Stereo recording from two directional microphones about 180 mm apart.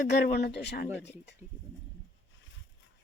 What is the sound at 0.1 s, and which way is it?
Speech, 70° left (ahead or behind).